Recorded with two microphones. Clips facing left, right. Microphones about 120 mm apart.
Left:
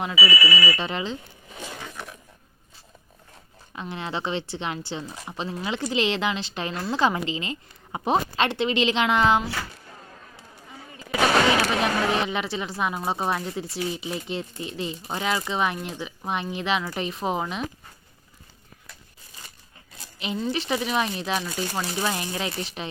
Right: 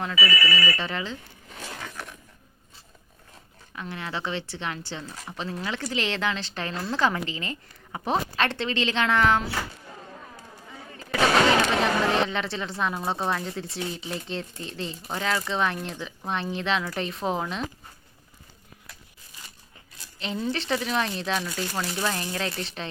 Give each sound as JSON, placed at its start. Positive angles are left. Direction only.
{"t": 0.0, "sound": "speech", "side_deg": 15}
{"t": 1.7, "sound": "zipper", "side_deg": 5}
{"t": 3.7, "sound": "speech", "side_deg": 20}
{"t": 11.6, "sound": "a woman's voice", "side_deg": 10}
{"t": 20.1, "sound": "speech", "side_deg": 10}